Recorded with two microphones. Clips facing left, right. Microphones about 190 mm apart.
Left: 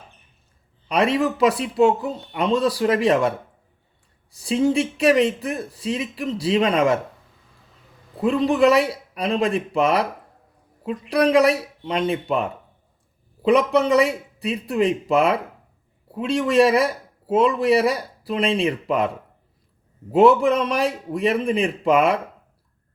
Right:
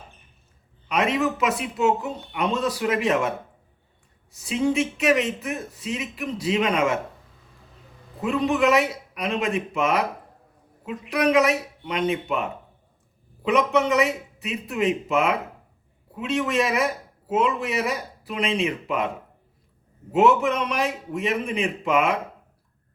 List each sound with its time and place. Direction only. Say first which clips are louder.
0.9 s a man's voice: left 3 dB; 35° left (ahead or behind)
4.4 s a man's voice: left 3 dB; 35° left (ahead or behind)
8.2 s a man's voice: left 4 dB; 35° left (ahead or behind)
20.1 s a man's voice: left 4 dB; 35° left (ahead or behind)